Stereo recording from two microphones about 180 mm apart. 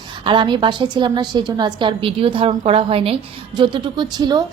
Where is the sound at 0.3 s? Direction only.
25° right (ahead or behind).